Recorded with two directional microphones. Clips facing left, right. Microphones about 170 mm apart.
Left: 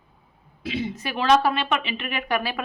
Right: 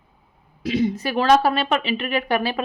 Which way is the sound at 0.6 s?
40° right (ahead or behind).